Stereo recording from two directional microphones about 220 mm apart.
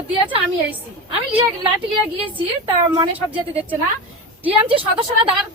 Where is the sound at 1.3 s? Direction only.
25° right (ahead or behind).